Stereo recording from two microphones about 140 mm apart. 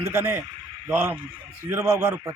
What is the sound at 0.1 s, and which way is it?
A man's voice, 15° right (ahead or behind).